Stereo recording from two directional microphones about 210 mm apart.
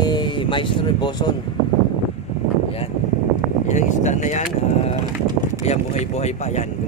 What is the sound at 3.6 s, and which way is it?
Speech, 35° left (ahead or behind).